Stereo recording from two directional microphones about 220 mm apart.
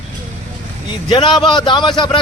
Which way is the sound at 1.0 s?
20° left (ahead or behind).